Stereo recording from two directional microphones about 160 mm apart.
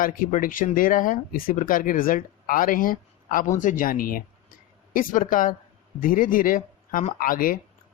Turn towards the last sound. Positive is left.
turn(degrees=60)  # may be behind; listen again after turning